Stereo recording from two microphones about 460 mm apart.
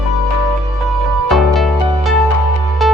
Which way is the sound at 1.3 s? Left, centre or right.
Centre.